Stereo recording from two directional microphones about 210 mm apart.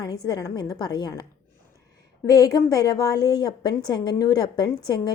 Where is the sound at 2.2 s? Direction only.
15° left (ahead or behind).